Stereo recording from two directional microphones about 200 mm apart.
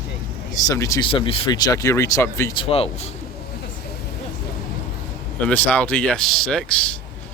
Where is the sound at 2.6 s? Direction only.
30° left (ahead or behind).